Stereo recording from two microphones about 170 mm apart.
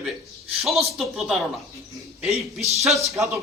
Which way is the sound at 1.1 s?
Centre (ahead or behind).